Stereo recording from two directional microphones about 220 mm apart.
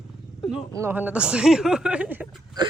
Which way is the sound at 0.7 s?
10° right (ahead or behind).